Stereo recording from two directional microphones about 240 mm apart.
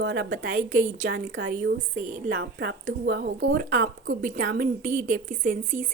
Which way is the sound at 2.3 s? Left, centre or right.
Right.